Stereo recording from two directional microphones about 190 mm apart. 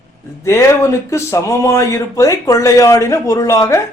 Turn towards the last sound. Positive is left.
turn(degrees=15)  # may be behind; listen again after turning